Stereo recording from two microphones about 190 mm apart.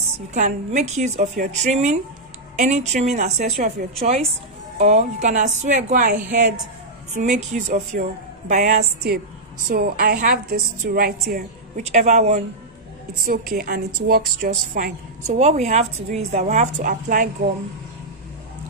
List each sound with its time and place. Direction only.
0.3 s a woman's voice: 40° right (ahead or behind)
7.2 s a woman's voice: 40° right (ahead or behind)
11.8 s a woman's voice: 35° right (ahead or behind)
13.2 s a woman's voice: 50° right (ahead or behind)